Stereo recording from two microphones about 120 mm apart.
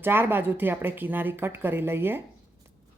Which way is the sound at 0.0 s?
15° right (ahead or behind).